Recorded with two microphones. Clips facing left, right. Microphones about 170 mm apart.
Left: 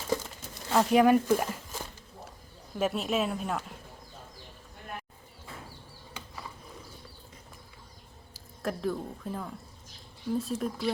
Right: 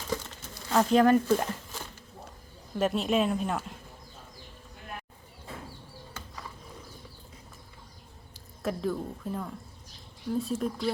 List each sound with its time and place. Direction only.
0.7 s speech: 10° left (ahead or behind)
2.7 s speech: 5° left (ahead or behind)
8.3 s speech: centre (ahead or behind)